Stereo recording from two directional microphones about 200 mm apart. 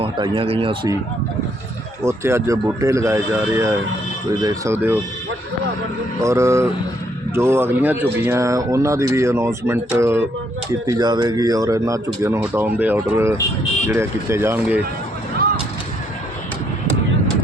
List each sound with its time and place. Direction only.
0.0 s speech: 25° right (ahead or behind)
2.0 s speech: 15° right (ahead or behind)
6.2 s speech: 15° right (ahead or behind)